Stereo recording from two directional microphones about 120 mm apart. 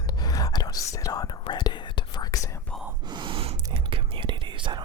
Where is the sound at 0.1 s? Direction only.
35° left (ahead or behind).